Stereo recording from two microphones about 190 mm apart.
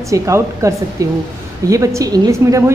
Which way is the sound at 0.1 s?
15° right (ahead or behind).